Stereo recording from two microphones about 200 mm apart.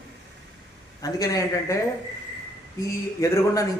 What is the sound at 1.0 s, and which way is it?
Speech, 15° left (ahead or behind).